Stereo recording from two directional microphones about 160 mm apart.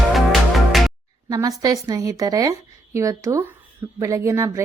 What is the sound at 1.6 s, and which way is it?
A woman's voice, 25° right (ahead or behind).